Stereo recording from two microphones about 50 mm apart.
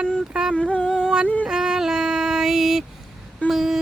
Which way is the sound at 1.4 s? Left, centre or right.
Centre.